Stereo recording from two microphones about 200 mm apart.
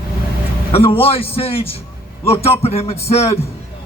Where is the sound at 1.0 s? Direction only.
30° left (ahead or behind).